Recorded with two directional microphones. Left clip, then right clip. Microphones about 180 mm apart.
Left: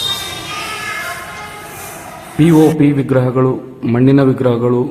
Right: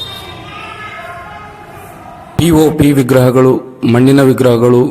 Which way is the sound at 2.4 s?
45° right (ahead or behind).